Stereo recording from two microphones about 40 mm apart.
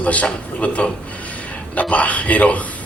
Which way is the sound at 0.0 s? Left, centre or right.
Left.